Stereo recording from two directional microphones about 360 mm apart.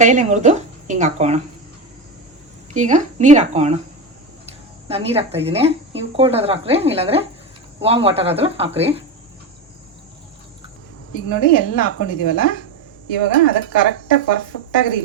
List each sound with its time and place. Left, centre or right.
0.0 s speech: right
2.7 s speech: centre
4.9 s speech: centre
11.1 s speech: left